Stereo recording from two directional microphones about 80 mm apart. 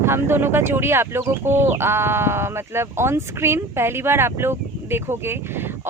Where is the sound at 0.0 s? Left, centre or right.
Right.